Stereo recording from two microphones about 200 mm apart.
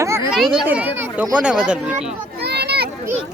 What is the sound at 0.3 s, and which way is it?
Speech, centre (ahead or behind).